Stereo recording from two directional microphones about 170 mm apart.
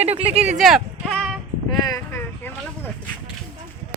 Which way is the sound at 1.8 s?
15° left (ahead or behind).